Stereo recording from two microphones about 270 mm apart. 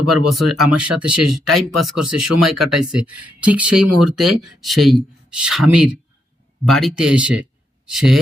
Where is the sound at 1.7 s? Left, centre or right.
Right.